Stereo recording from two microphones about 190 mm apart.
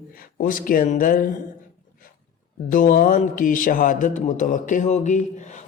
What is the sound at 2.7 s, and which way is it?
Mantra, 45° left (ahead or behind).